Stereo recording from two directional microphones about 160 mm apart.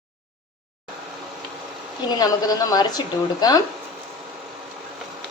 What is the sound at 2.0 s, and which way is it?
Speech, 25° left (ahead or behind).